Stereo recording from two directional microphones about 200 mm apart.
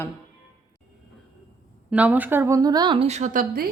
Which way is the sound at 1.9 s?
5° right (ahead or behind).